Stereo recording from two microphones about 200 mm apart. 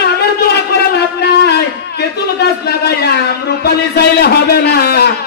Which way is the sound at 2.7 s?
55° left (ahead or behind).